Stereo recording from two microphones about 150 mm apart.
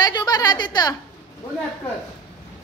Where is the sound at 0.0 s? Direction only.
25° left (ahead or behind).